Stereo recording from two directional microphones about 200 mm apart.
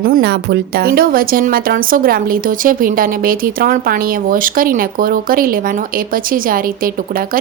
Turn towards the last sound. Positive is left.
turn(degrees=-45)  # may be behind; listen again after turning